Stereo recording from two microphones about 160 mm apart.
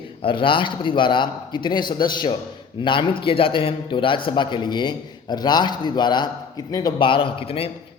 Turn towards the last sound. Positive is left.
turn(degrees=35)  # may be behind; listen again after turning